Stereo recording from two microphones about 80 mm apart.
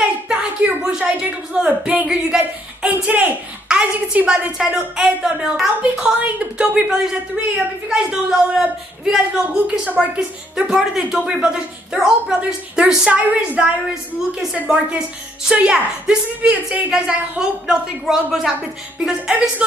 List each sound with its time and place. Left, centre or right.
0.3 s a sound: centre
0.9 s a woman's voice: centre
3.1 s speech: right
3.6 s a woman's voice: centre